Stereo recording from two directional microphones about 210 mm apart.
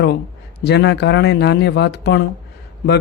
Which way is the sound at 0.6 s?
55° left (ahead or behind).